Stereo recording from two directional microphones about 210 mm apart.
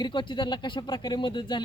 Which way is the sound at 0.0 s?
20° left (ahead or behind).